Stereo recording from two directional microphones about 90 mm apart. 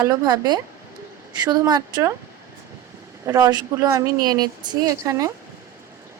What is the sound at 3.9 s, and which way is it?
Speech, 50° right (ahead or behind).